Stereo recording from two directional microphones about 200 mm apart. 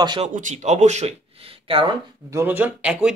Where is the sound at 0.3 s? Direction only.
40° right (ahead or behind).